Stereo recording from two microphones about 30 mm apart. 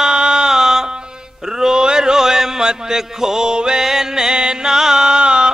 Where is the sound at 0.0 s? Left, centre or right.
Right.